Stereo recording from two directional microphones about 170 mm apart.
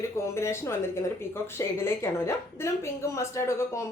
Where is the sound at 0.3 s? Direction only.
15° left (ahead or behind).